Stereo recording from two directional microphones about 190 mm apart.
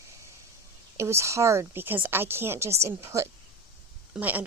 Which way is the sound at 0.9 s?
15° right (ahead or behind).